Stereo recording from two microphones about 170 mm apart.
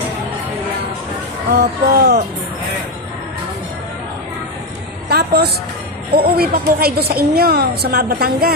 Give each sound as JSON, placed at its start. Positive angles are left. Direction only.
{"t": 1.5, "sound": "a woman's voice", "side_deg": -65}
{"t": 5.1, "sound": "a sound", "side_deg": -65}
{"t": 6.1, "sound": "a woman's voice", "side_deg": -65}